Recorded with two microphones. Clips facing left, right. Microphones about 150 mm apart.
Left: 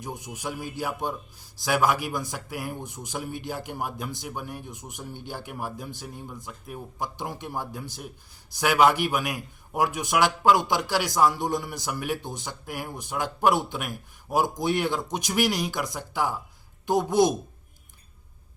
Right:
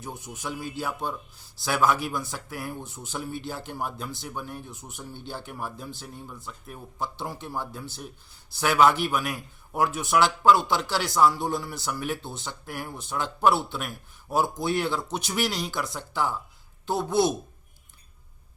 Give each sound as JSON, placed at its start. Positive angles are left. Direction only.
{"t": 0.0, "sound": "speech", "side_deg": 15}